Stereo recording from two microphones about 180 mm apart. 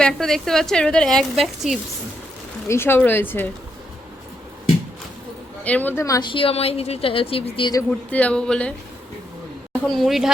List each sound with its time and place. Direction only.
0.0 s a woman's voice: centre (ahead or behind)
2.6 s speech: 15° left (ahead or behind)
5.6 s speech: 10° left (ahead or behind); by 7.8 s 30° left (ahead or behind)
7.9 s speech: 5° left (ahead or behind)
9.9 s a woman's voice: centre (ahead or behind)